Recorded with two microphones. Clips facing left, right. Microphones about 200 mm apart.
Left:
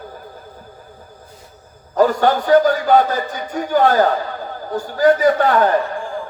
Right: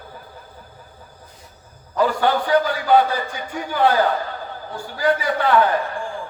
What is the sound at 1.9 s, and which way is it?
A man's voice, 45° left (ahead or behind).